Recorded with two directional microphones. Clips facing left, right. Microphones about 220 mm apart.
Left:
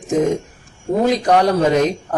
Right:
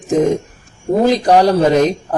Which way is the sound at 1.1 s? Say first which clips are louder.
Right 3 dB; 35° right (ahead or behind).